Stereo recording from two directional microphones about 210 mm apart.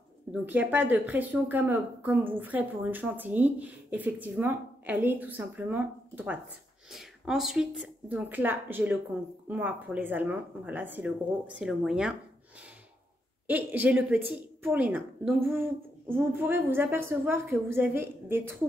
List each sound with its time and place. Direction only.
0.3 s a woman's voice: 10° right (ahead or behind)
13.5 s speech: 10° right (ahead or behind)